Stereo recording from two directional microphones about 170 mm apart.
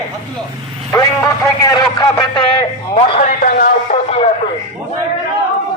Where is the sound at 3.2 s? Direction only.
50° left (ahead or behind).